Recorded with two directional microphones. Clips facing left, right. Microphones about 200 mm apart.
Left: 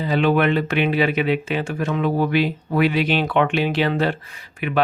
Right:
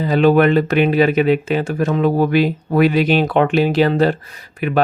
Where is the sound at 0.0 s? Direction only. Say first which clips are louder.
Right 6 dB; 40° right (ahead or behind).